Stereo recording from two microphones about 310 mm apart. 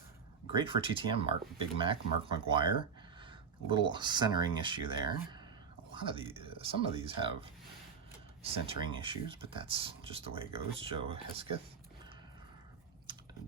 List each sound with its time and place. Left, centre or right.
0.5 s speech: centre
8.4 s speech: centre